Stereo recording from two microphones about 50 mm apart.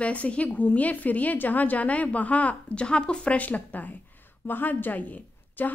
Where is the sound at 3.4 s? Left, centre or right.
Left.